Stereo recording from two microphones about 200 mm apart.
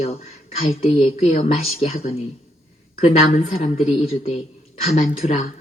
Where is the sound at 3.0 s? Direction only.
30° left (ahead or behind).